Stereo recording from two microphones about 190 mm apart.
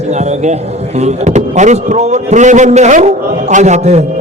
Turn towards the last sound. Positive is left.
turn(degrees=-35)  # may be behind; listen again after turning